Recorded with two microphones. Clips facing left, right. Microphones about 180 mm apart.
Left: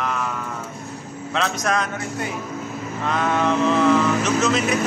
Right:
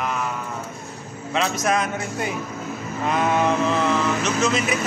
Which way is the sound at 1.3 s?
5° right (ahead or behind).